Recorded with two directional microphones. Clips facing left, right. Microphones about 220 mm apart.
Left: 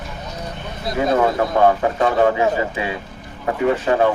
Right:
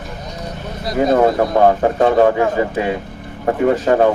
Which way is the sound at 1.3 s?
35° right (ahead or behind).